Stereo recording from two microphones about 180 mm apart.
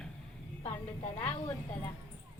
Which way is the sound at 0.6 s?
30° left (ahead or behind).